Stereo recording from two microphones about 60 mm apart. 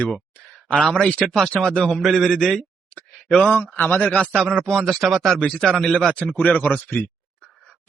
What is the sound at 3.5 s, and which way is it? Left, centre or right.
Speech, left.